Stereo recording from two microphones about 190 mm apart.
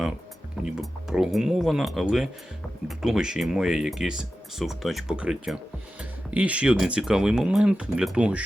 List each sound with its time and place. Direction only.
0.6 s speech: 5° right (ahead or behind)